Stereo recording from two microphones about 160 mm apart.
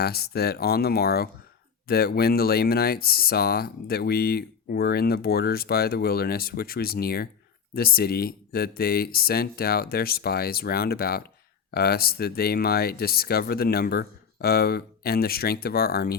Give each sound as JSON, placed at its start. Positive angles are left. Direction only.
{"t": 0.0, "sound": "speech", "side_deg": 80}